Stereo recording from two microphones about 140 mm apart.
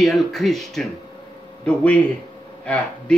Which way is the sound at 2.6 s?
5° left (ahead or behind).